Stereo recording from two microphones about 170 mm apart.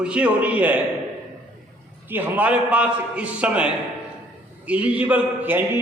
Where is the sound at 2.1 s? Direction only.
10° right (ahead or behind).